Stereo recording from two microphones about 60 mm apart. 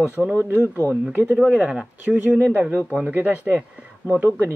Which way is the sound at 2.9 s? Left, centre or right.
Right.